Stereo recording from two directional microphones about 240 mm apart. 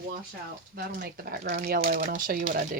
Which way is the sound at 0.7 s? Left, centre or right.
Right.